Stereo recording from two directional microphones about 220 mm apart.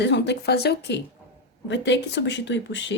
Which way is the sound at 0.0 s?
50° left (ahead or behind).